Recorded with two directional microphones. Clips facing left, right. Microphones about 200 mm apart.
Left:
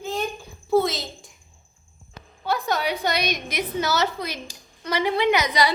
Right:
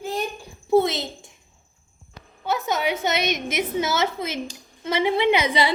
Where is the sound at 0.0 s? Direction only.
10° right (ahead or behind).